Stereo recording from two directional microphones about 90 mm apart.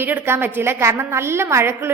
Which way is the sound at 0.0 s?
25° right (ahead or behind).